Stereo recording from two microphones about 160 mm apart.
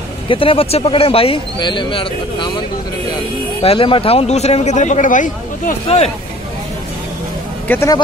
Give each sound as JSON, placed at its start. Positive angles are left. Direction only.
{"t": 0.3, "sound": "speech", "side_deg": 35}
{"t": 3.6, "sound": "speech", "side_deg": 35}
{"t": 5.9, "sound": "speech", "side_deg": 40}
{"t": 7.6, "sound": "speech", "side_deg": 10}